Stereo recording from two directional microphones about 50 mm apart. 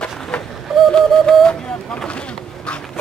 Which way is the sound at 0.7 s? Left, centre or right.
Centre.